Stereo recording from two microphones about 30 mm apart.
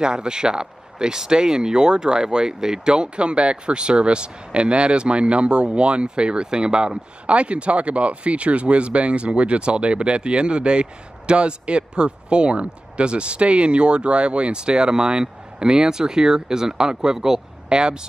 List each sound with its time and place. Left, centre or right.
0.0 s speech: right
7.2 s speech: right; by 17.4 s centre
17.6 s speech: right